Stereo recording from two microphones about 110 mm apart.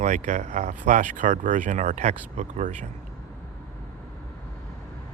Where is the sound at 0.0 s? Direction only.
90° right.